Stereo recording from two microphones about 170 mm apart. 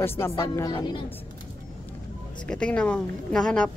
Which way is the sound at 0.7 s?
30° left (ahead or behind).